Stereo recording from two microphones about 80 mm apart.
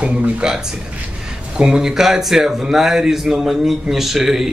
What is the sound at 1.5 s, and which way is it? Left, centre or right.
A man's voice, centre.